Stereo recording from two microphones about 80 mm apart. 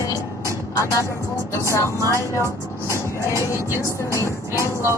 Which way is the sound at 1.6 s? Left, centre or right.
Left.